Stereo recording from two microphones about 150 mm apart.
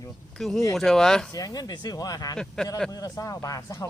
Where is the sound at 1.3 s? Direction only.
25° left (ahead or behind).